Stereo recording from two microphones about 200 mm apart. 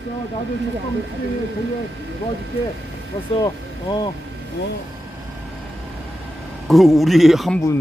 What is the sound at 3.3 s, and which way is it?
Speech, 20° left (ahead or behind).